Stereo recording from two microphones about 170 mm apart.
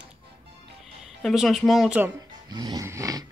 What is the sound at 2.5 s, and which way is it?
Music, 25° right (ahead or behind).